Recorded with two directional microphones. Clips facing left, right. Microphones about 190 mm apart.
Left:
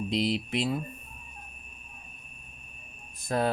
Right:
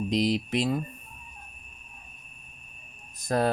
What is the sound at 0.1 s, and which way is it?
Speech, 40° right (ahead or behind).